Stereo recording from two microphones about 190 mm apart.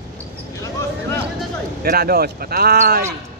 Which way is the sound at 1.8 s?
55° right (ahead or behind).